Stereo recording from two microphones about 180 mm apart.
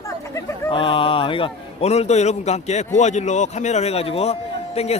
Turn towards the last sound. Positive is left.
turn(degrees=35)  # may be behind; listen again after turning